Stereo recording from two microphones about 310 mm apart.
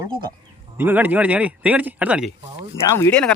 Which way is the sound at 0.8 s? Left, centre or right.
Centre.